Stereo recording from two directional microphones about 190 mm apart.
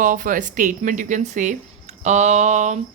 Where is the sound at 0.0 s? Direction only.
45° right (ahead or behind).